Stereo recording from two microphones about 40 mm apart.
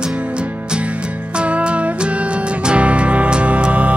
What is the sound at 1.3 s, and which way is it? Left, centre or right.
Music, right.